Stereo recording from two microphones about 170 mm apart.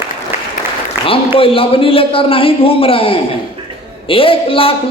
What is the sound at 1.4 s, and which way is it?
A man's voice, 35° left (ahead or behind).